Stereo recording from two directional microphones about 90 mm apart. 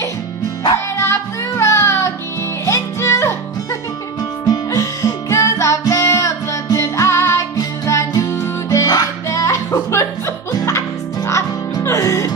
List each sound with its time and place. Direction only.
0.9 s music: 30° left (ahead or behind)
4.5 s music: 40° left (ahead or behind)